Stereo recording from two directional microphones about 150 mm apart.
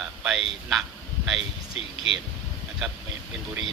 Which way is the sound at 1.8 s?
40° left (ahead or behind).